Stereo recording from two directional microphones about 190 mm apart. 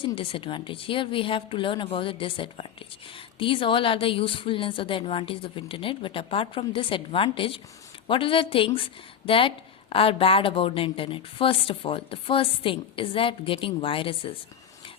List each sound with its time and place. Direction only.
0.0 s speech: 25° left (ahead or behind)